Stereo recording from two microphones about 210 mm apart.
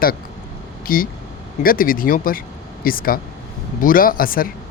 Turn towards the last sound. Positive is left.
turn(degrees=45)  # may be behind; listen again after turning